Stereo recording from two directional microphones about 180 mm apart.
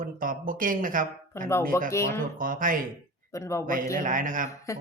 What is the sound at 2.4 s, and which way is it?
Speech, 50° right (ahead or behind).